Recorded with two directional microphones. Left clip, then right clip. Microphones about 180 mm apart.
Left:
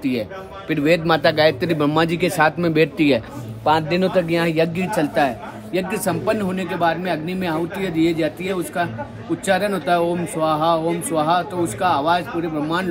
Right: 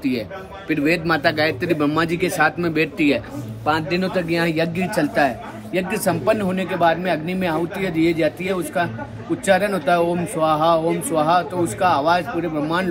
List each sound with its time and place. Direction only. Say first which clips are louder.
0.7 s a man's voice: left 2 dB; 45° left (ahead or behind)
3.7 s a man's voice: left 4 dB; 35° left (ahead or behind)
4.9 s speech: right 1 dB; 20° left (ahead or behind)